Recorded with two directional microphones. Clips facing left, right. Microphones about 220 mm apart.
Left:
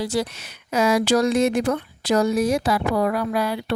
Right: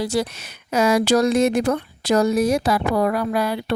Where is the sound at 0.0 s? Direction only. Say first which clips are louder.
Right 2 dB; 45° right (ahead or behind).